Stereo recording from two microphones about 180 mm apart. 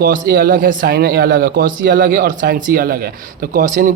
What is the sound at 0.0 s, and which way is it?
A man's voice, 55° right (ahead or behind).